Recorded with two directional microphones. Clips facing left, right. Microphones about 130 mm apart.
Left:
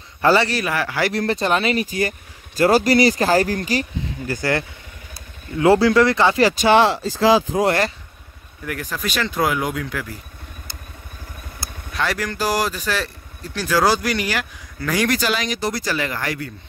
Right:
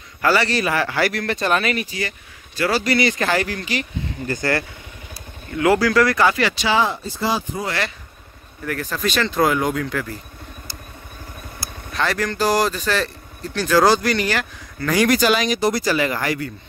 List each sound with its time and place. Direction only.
0.2 s a man's voice: 25° left (ahead or behind)
0.5 s speech: 5° left (ahead or behind)
1.1 s speech: 30° left (ahead or behind)
1.9 s speech: 45° left (ahead or behind)
4.3 s speech: 15° left (ahead or behind)
5.6 s speech: 30° left (ahead or behind)
6.4 s speech: 50° left (ahead or behind)
6.8 s speech: 90° left
8.6 s speech: 10° left (ahead or behind)
11.9 s speech: 5° left (ahead or behind)
15.0 s speech: 15° right (ahead or behind)